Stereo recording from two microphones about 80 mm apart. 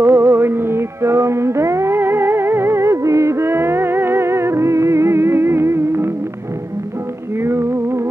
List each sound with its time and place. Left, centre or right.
0.0 s music: right
7.4 s music: right